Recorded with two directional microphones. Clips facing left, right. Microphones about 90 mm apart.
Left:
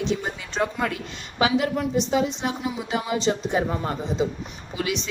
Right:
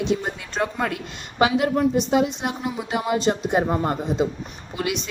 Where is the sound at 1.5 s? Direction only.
55° right (ahead or behind).